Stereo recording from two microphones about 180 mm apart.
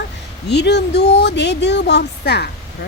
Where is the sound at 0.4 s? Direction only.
70° left (ahead or behind).